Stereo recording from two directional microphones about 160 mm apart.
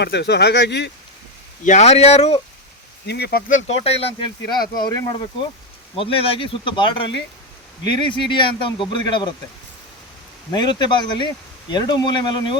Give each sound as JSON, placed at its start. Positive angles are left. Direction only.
{"t": 0.0, "sound": "speech", "side_deg": 90}
{"t": 1.6, "sound": "speech", "side_deg": 45}
{"t": 3.1, "sound": "speech", "side_deg": 85}
{"t": 3.5, "sound": "speech", "side_deg": 40}
{"t": 10.5, "sound": "speech", "side_deg": 25}